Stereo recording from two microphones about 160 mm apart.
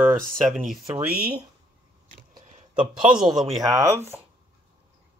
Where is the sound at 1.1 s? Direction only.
75° right (ahead or behind).